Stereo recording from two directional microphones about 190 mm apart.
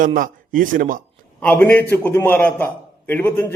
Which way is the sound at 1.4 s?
10° left (ahead or behind).